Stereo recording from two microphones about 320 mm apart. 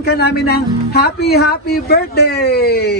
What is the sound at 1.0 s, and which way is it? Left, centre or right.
Speech, left.